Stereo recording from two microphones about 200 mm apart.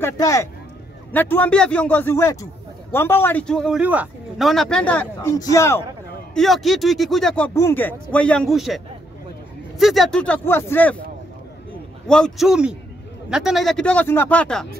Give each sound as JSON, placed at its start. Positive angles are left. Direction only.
{"t": 0.0, "sound": "speech", "side_deg": 15}
{"t": 6.3, "sound": "speech", "side_deg": 0}
{"t": 12.1, "sound": "speech", "side_deg": 0}